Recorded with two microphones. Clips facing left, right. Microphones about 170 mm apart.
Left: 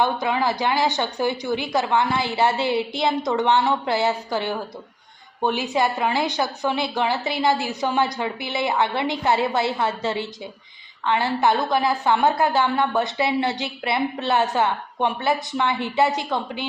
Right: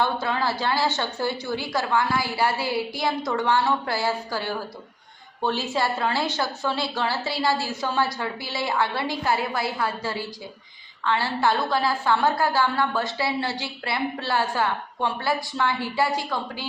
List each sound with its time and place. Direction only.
0.0 s a woman's voice: 15° left (ahead or behind)